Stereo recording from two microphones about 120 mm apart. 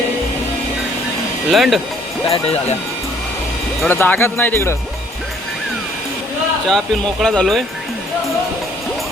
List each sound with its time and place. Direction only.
1.5 s speech: centre (ahead or behind)
2.3 s speech: 55° left (ahead or behind)
3.8 s speech: 15° left (ahead or behind)
6.7 s speech: 5° left (ahead or behind)